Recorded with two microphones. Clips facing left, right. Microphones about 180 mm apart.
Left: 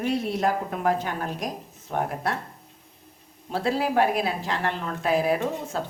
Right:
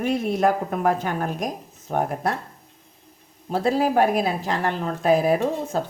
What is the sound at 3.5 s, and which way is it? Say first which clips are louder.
A woman's voice: right 4 dB; 45° right (ahead or behind).